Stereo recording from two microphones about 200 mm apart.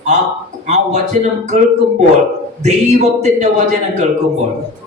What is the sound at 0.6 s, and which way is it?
Speech, 35° right (ahead or behind).